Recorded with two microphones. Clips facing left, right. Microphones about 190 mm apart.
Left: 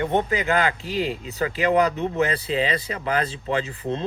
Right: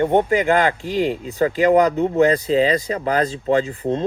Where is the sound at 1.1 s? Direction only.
45° right (ahead or behind).